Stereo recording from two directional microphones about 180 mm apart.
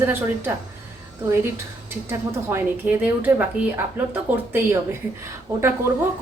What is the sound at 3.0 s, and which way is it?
A woman's voice, 10° right (ahead or behind).